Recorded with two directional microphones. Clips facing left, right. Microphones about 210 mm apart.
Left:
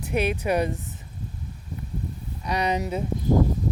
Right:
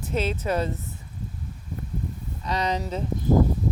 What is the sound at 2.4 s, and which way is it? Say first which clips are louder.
Speech: left 2 dB; 15° left (ahead or behind).